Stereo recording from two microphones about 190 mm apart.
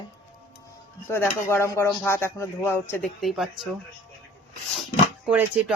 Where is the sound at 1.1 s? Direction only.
10° left (ahead or behind).